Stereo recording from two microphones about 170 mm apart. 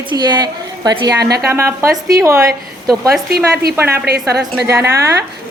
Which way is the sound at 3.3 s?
65° right (ahead or behind).